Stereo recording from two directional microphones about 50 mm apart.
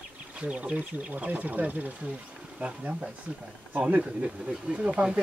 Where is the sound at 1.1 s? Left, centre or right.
Right.